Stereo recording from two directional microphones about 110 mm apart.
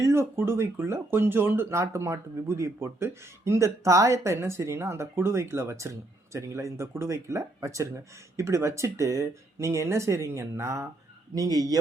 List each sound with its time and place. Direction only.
0.0 s speech: 25° right (ahead or behind)